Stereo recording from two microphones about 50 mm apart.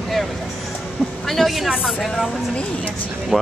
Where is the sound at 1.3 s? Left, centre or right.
Centre.